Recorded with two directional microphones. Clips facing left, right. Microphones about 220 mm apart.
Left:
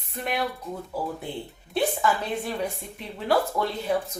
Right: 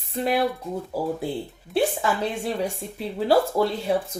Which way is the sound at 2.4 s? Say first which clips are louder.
Right 3 dB; 30° right (ahead or behind).